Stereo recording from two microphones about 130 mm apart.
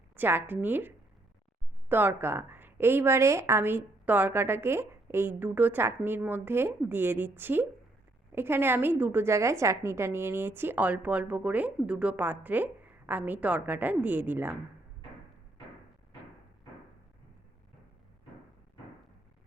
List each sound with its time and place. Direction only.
0.2 s a woman's voice: 15° right (ahead or behind)